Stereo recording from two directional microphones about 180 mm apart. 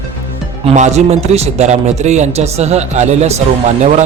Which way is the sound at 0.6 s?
40° right (ahead or behind).